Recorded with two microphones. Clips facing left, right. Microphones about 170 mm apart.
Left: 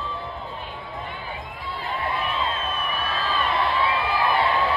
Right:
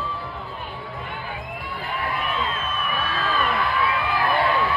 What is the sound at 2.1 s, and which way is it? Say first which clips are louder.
Crowd: even; 30° left (ahead or behind).